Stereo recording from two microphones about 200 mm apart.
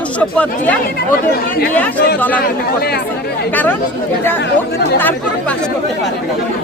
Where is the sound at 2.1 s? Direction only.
10° left (ahead or behind).